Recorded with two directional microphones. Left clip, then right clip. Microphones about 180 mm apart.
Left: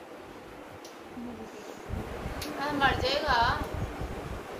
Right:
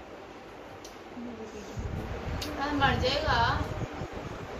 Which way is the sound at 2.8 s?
45° left (ahead or behind).